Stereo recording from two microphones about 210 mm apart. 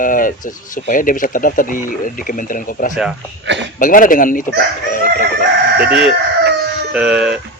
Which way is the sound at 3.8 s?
40° left (ahead or behind).